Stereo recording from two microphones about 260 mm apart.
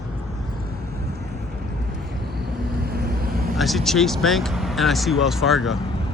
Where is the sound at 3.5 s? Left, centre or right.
Centre.